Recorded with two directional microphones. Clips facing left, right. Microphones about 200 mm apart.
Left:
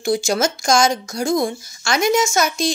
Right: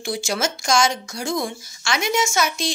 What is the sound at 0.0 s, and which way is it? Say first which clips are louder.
A woman's voice: left 6 dB; 40° left (ahead or behind).